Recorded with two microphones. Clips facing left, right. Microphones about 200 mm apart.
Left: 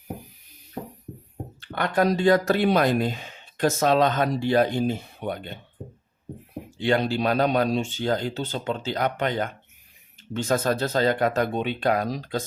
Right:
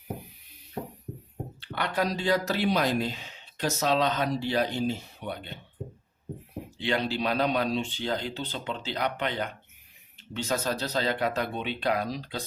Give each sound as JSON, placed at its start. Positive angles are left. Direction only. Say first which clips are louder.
{"t": 1.6, "sound": "speech", "louder": "left 6 dB", "side_deg": 50}
{"t": 6.7, "sound": "speech", "louder": "left 6 dB", "side_deg": 45}